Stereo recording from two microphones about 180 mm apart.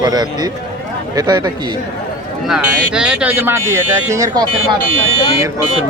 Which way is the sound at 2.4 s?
5° right (ahead or behind).